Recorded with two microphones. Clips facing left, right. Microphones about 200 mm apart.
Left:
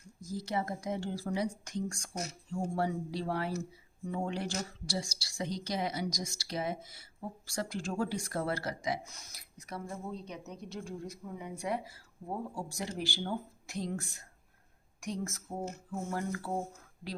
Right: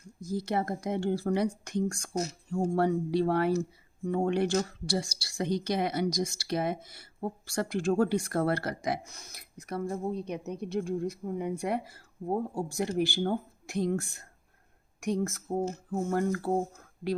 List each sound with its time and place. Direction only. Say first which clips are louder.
0.3 s a woman's voice: right 5 dB; 60° right (ahead or behind)
16.0 s mantra: right 8 dB; 50° right (ahead or behind)